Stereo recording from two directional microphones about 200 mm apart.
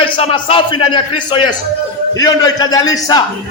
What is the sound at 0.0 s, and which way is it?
Speech, 25° left (ahead or behind).